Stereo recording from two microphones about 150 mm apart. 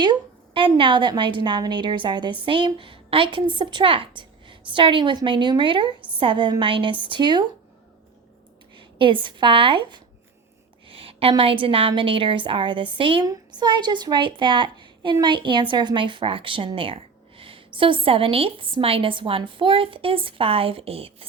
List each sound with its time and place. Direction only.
0.0 s a woman's voice: 30° right (ahead or behind)
8.7 s a woman's voice: 35° right (ahead or behind)